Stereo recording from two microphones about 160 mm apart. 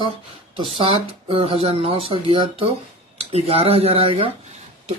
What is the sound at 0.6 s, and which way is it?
Speech, 35° right (ahead or behind).